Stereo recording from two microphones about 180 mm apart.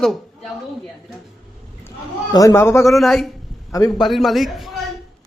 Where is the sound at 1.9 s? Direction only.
20° left (ahead or behind).